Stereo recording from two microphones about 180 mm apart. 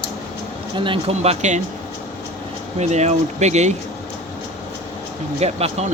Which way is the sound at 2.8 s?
40° right (ahead or behind).